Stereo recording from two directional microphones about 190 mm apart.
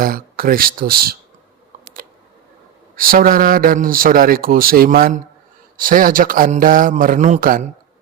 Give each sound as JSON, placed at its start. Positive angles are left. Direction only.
{"t": 0.0, "sound": "a man's voice", "side_deg": -50}
{"t": 2.9, "sound": "a man's voice", "side_deg": -50}